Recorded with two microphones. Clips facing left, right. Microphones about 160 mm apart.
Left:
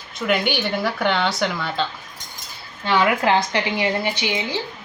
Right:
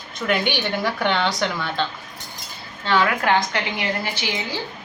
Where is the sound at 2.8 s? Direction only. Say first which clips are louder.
Left 2 dB; 15° left (ahead or behind).